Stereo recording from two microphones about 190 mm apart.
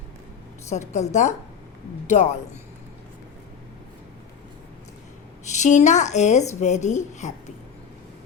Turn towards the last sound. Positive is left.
turn(degrees=40)  # may be behind; listen again after turning